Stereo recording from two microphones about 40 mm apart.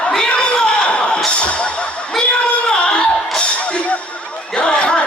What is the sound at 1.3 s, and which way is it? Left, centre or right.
Music, left.